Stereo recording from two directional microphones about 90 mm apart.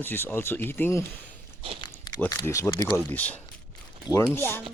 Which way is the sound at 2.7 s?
60° left (ahead or behind).